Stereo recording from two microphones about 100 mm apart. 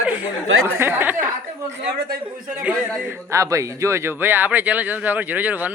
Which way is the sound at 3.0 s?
25° right (ahead or behind).